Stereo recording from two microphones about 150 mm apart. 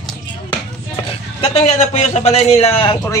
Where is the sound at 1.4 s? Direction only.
45° left (ahead or behind).